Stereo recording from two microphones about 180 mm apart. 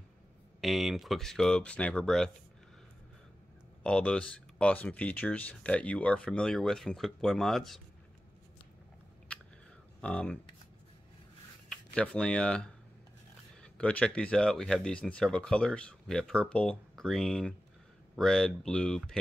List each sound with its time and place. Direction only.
0.6 s speech: centre (ahead or behind)
3.8 s speech: 5° left (ahead or behind)
10.0 s speech: 10° left (ahead or behind)
11.7 s speech: 5° left (ahead or behind)